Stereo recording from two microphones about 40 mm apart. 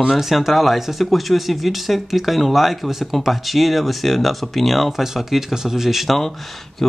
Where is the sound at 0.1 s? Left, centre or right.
Centre.